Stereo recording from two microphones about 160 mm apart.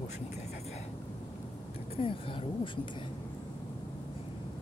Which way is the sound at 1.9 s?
35° left (ahead or behind).